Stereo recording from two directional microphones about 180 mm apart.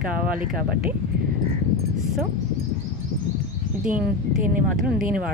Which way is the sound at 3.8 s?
5° right (ahead or behind).